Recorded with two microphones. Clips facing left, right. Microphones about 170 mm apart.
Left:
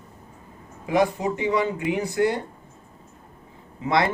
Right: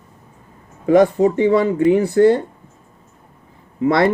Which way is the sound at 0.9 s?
45° right (ahead or behind).